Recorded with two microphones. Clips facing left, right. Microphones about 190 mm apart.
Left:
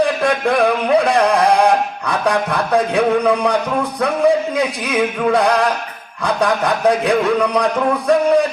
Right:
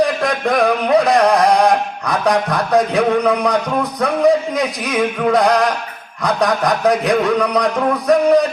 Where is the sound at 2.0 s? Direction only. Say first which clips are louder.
Right 1 dB; 30° left (ahead or behind).